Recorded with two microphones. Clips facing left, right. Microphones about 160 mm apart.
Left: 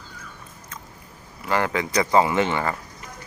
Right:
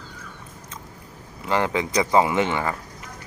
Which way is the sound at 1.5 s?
20° right (ahead or behind).